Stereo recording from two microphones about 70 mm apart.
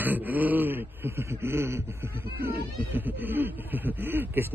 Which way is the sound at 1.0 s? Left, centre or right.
Right.